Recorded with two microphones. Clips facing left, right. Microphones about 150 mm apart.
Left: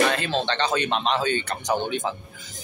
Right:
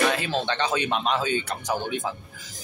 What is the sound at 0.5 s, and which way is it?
Speech, 10° right (ahead or behind).